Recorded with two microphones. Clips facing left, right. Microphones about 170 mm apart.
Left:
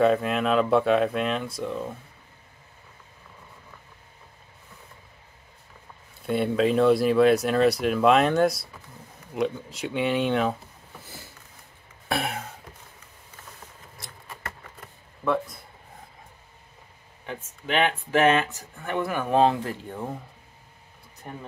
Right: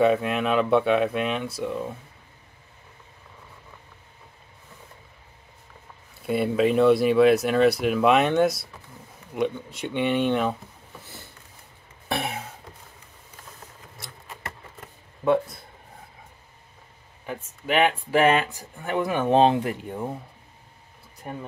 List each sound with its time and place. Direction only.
0.0 s speech: centre (ahead or behind)
6.2 s speech: centre (ahead or behind)
9.8 s speech: 5° left (ahead or behind)
11.0 s a sound: centre (ahead or behind)
15.2 s a sound: 30° right (ahead or behind)
17.3 s speech: 5° right (ahead or behind)